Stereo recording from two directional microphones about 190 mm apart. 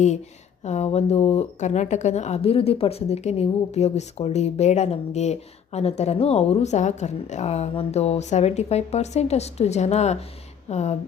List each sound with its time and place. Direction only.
0.6 s speech: 35° left (ahead or behind)